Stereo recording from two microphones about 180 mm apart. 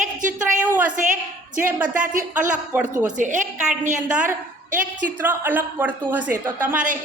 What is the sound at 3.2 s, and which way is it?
Speech, 45° right (ahead or behind).